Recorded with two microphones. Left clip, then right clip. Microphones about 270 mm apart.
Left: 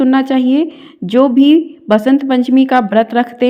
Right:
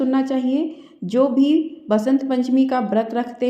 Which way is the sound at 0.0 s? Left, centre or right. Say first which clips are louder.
Left 8 dB; left.